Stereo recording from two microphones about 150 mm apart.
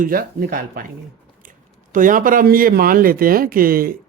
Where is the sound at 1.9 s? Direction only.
65° right (ahead or behind).